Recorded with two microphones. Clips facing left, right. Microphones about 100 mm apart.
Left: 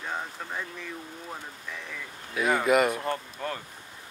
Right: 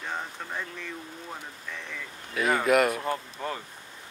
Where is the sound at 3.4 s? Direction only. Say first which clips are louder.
Even; 10° right (ahead or behind).